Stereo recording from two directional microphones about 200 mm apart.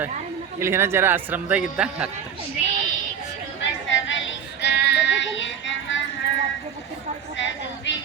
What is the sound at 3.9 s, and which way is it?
Music, 70° left (ahead or behind).